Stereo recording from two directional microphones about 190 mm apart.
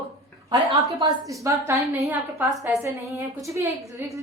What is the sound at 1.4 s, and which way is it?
A woman's voice, 15° right (ahead or behind).